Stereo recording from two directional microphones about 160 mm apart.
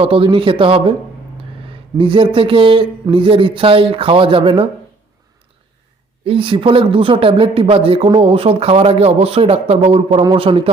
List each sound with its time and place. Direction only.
0.0 s speech: 35° right (ahead or behind)
2.0 s speech: 35° right (ahead or behind)
6.2 s speech: 35° right (ahead or behind)